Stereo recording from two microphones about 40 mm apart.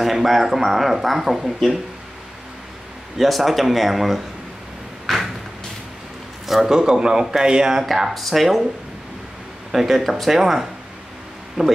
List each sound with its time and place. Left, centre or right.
0.0 s speech: centre
3.2 s speech: centre
5.0 s a sound: centre
6.4 s a man's voice: centre
8.1 s speech: centre
9.7 s a man's voice: centre